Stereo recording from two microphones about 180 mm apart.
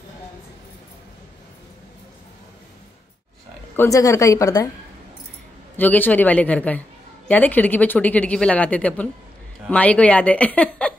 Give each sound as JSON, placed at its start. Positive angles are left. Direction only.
{"t": 3.7, "sound": "speech", "side_deg": 15}
{"t": 5.8, "sound": "speech", "side_deg": 10}